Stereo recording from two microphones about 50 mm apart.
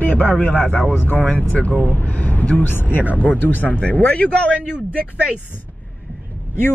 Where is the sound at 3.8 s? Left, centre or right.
Left.